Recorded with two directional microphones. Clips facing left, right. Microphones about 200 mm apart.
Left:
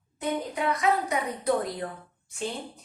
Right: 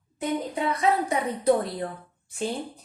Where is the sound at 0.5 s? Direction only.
30° right (ahead or behind).